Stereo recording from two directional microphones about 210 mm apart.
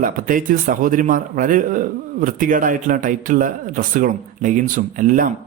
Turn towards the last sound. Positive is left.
turn(degrees=-40)  # may be behind; listen again after turning